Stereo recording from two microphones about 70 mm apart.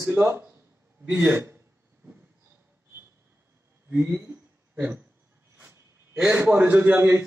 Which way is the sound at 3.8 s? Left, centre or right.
Right.